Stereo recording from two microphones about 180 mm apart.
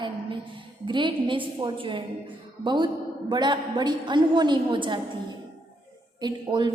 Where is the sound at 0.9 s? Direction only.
25° right (ahead or behind).